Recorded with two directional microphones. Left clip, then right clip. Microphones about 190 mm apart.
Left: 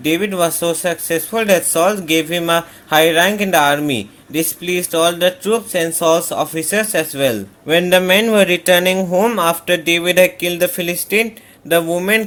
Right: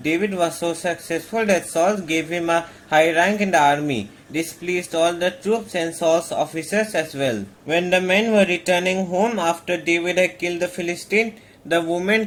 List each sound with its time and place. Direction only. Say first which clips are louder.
0.0 s speech: left 4 dB; 40° left (ahead or behind)